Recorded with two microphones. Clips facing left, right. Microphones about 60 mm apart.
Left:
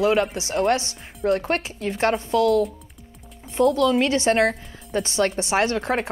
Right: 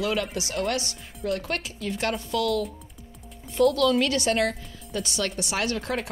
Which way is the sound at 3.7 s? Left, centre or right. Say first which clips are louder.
Left 3 dB; left.